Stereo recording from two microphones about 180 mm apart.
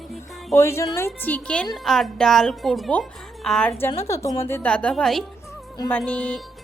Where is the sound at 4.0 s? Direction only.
15° left (ahead or behind).